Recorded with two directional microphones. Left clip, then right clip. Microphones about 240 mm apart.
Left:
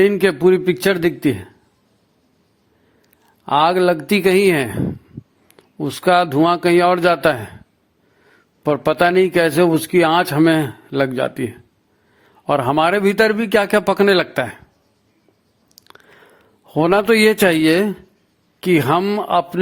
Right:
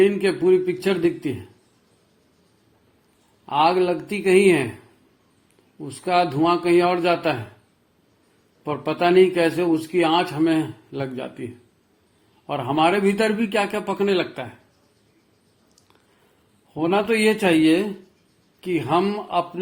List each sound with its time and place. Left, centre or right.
0.0 s a man's voice: left
3.4 s a man's voice: left
5.8 s a man's voice: left
8.6 s a man's voice: left
12.5 s a man's voice: left
16.7 s a man's voice: left